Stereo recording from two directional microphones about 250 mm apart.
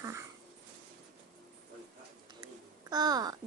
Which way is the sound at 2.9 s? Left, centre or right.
Centre.